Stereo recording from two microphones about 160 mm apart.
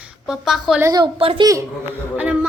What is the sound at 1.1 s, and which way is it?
Speech, 35° right (ahead or behind).